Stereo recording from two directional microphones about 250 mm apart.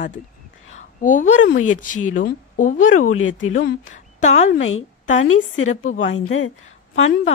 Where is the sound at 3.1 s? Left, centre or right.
Left.